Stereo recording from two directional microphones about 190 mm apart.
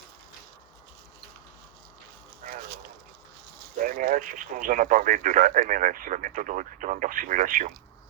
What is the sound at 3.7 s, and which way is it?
Speech, 45° right (ahead or behind).